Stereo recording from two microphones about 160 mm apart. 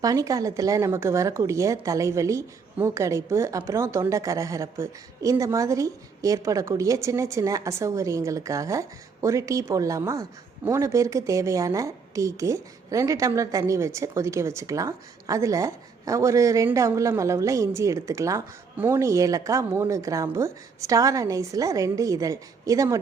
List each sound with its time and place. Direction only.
0.0 s a woman's voice: 20° right (ahead or behind)